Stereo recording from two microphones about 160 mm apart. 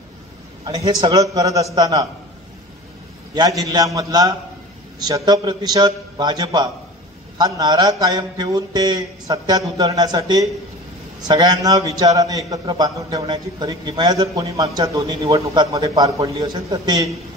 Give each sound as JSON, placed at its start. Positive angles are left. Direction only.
{"t": 0.7, "sound": "speech", "side_deg": -25}
{"t": 3.3, "sound": "speech", "side_deg": -20}